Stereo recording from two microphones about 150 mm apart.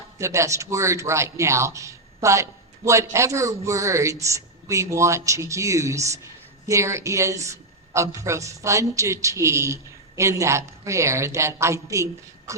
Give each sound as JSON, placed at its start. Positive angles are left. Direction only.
{"t": 0.2, "sound": "speech", "side_deg": -20}